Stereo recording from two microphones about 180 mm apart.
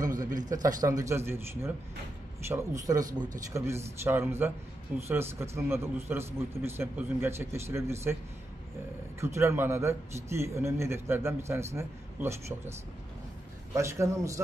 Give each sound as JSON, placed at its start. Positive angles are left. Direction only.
{"t": 0.5, "sound": "a man's voice", "side_deg": -20}
{"t": 9.2, "sound": "a man's voice", "side_deg": -15}
{"t": 13.7, "sound": "a man's voice", "side_deg": -15}